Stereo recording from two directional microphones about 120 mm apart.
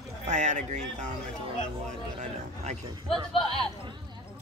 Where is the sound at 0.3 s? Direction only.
85° right.